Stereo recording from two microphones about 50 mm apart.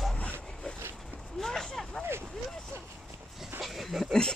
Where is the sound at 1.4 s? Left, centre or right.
Centre.